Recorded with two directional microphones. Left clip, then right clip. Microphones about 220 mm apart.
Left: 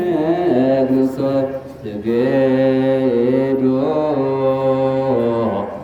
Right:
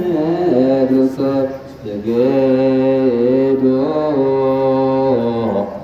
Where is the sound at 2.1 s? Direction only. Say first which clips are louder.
Right 2 dB; 15° left (ahead or behind).